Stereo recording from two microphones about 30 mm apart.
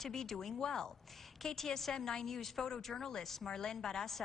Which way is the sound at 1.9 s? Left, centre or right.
Left.